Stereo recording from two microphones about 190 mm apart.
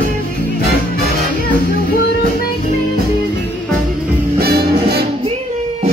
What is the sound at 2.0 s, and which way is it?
Music, 50° left (ahead or behind).